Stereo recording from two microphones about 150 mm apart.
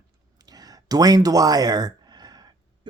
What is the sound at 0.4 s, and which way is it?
Speech, 25° right (ahead or behind).